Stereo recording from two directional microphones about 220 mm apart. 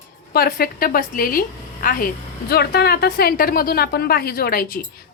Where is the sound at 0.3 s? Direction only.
45° left (ahead or behind).